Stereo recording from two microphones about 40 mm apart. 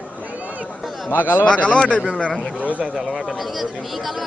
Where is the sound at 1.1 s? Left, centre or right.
Left.